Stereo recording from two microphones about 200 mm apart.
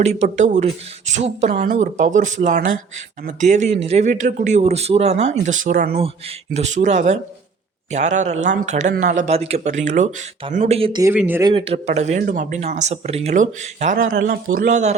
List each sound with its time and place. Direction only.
0.0 s speech: 35° right (ahead or behind)
1.5 s speech: 50° right (ahead or behind)
6.5 s speech: 35° right (ahead or behind)
11.0 s speech: 10° right (ahead or behind)
11.4 s speech: 30° right (ahead or behind)